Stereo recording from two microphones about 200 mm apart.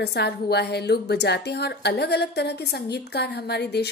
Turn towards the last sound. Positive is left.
turn(degrees=55)  # may be behind; listen again after turning